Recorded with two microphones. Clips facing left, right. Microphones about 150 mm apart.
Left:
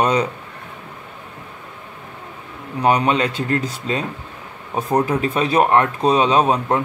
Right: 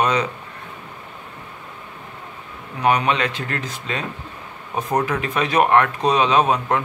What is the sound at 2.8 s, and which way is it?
Speech, 35° left (ahead or behind).